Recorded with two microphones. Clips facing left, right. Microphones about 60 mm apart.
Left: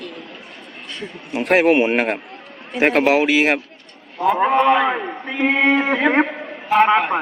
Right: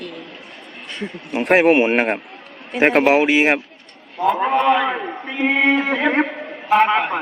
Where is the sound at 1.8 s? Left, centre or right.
Right.